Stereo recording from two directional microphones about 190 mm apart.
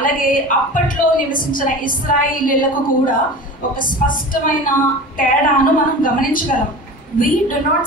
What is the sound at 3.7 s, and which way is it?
Speech, 45° left (ahead or behind).